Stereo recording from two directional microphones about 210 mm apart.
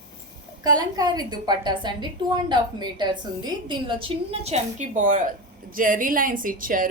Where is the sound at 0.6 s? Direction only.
20° right (ahead or behind).